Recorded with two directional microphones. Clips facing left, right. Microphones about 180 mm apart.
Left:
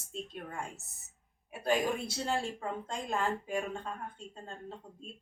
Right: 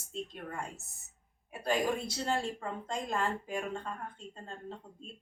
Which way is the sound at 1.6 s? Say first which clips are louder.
Left 1 dB; centre (ahead or behind).